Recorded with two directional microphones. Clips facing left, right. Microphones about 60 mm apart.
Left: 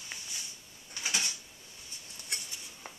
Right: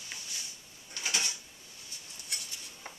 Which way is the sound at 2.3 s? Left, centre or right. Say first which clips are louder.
Left 2 dB; left.